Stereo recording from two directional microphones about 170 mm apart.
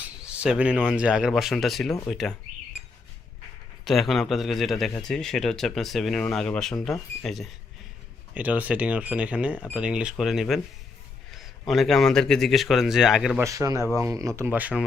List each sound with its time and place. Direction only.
0.3 s a man's voice: 5° right (ahead or behind)
3.8 s a man's voice: centre (ahead or behind)
8.3 s a man's voice: 10° right (ahead or behind)
13.4 s speech: 20° right (ahead or behind)